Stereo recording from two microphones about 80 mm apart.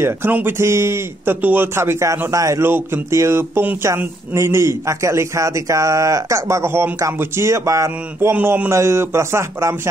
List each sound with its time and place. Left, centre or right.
0.0 s a man's voice: right
1.8 s speech: right
2.6 s speech: right
8.3 s speech: right